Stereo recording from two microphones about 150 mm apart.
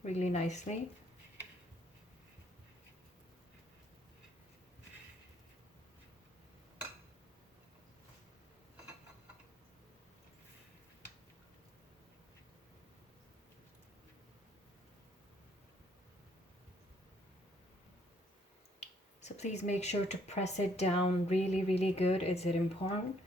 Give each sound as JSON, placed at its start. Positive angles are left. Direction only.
{"t": 0.0, "sound": "speech", "side_deg": 50}
{"t": 18.8, "sound": "speech", "side_deg": 50}